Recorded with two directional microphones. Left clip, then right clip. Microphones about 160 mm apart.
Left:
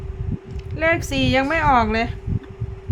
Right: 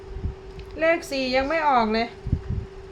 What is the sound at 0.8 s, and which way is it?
A woman's voice, 25° left (ahead or behind).